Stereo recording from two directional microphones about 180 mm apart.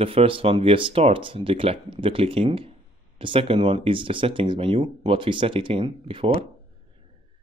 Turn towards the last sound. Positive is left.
turn(degrees=-30)  # may be behind; listen again after turning